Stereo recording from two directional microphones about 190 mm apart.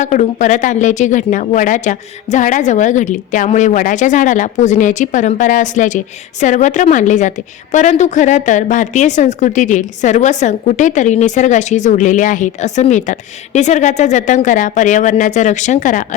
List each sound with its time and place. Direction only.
0.0 s a woman's voice: 40° left (ahead or behind)